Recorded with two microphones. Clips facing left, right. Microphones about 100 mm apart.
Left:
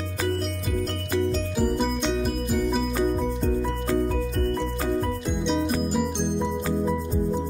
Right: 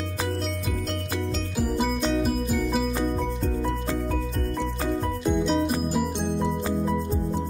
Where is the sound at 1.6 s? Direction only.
Centre (ahead or behind).